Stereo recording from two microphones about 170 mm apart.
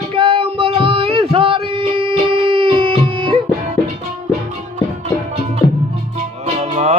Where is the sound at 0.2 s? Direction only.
30° right (ahead or behind).